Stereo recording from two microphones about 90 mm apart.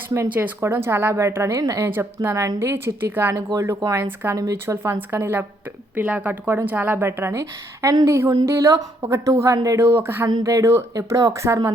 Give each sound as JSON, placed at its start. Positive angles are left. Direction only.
{"t": 0.3, "sound": "a woman's voice", "side_deg": -20}
{"t": 0.6, "sound": "a woman's voice", "side_deg": -30}
{"t": 3.3, "sound": "a woman's voice", "side_deg": -35}
{"t": 3.9, "sound": "a woman's voice", "side_deg": -25}